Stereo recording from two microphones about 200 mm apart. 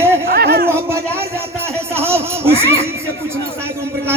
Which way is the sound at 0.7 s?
15° right (ahead or behind).